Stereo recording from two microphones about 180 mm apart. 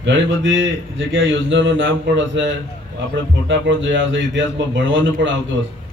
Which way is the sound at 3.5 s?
90° right.